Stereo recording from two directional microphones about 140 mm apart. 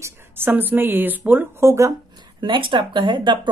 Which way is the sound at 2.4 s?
35° right (ahead or behind).